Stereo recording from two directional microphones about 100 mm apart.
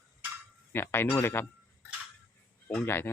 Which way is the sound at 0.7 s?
20° left (ahead or behind).